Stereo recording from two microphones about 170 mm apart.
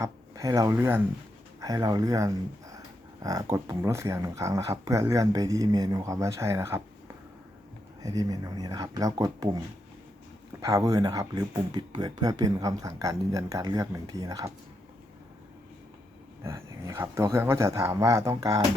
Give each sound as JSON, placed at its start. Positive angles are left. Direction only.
{"t": 0.0, "sound": "speech", "side_deg": -20}
{"t": 3.5, "sound": "speech", "side_deg": -20}
{"t": 8.0, "sound": "speech", "side_deg": -20}
{"t": 10.6, "sound": "speech", "side_deg": -20}
{"t": 16.4, "sound": "speech", "side_deg": -15}